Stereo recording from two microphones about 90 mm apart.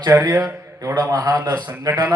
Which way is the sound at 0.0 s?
40° right (ahead or behind).